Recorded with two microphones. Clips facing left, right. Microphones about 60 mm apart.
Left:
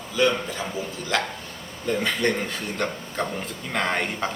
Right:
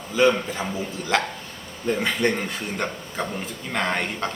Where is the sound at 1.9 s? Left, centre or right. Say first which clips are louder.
Right 1 dB; centre.